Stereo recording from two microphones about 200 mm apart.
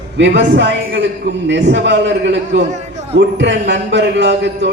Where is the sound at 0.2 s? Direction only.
60° right (ahead or behind).